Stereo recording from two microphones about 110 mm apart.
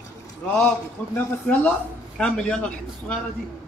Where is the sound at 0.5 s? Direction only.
15° left (ahead or behind).